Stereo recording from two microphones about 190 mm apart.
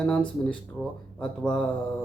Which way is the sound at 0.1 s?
5° left (ahead or behind).